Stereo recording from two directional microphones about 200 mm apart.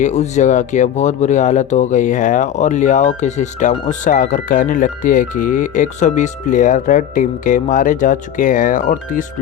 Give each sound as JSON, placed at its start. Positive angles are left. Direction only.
{"t": 0.0, "sound": "speech", "side_deg": 35}